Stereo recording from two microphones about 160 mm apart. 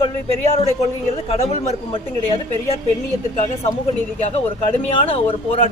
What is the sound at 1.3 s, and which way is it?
Speech, 45° left (ahead or behind).